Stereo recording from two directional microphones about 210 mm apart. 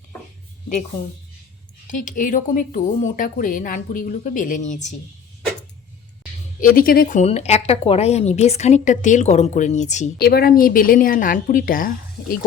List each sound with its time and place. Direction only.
1.9 s speech: 40° left (ahead or behind)
6.6 s speech: 40° left (ahead or behind)
10.2 s speech: 50° left (ahead or behind)